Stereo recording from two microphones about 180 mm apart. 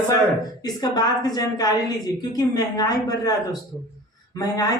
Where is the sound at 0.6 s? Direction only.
20° left (ahead or behind).